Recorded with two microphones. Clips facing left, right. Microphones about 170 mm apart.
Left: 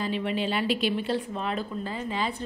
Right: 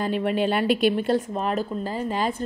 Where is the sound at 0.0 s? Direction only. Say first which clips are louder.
Right 5 dB; 50° right (ahead or behind).